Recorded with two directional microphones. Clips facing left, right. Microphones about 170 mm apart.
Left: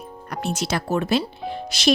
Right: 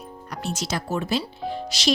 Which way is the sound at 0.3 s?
60° left (ahead or behind).